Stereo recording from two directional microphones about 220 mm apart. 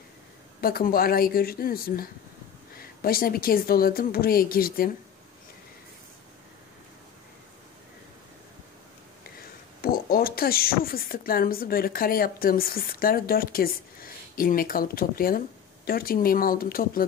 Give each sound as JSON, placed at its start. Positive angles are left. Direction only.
{"t": 0.6, "sound": "a woman's voice", "side_deg": 40}
{"t": 9.8, "sound": "speech", "side_deg": 45}